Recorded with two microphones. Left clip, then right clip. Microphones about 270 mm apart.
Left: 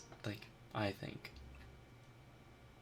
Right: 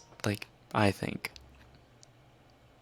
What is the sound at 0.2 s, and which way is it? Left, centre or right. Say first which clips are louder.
Speech: right 14 dB; right.